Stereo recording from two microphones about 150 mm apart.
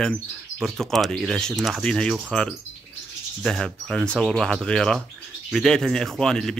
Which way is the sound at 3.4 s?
Centre (ahead or behind).